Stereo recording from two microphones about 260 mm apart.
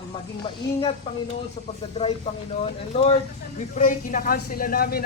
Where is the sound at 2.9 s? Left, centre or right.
Left.